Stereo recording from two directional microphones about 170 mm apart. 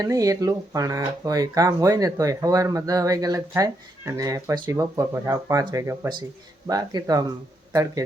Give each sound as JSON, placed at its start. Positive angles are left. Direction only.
{"t": 0.0, "sound": "speech", "side_deg": -20}